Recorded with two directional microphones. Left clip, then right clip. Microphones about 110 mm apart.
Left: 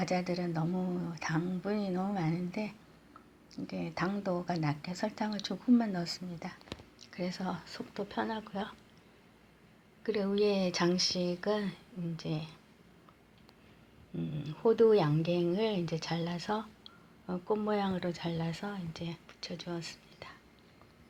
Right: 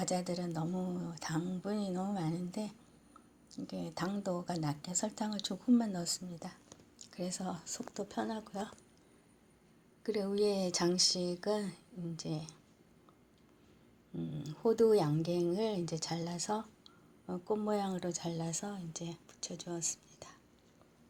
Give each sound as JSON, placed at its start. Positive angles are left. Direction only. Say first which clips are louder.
{"t": 0.0, "sound": "speech", "louder": "left 3 dB", "side_deg": -15}
{"t": 10.0, "sound": "speech", "louder": "left 3 dB", "side_deg": -30}
{"t": 14.2, "sound": "speech", "louder": "left 4 dB", "side_deg": -30}